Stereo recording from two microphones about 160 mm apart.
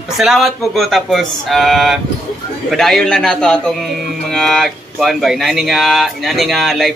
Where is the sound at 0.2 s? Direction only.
Centre (ahead or behind).